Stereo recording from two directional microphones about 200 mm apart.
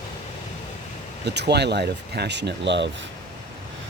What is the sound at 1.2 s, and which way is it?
Speech, 55° right (ahead or behind).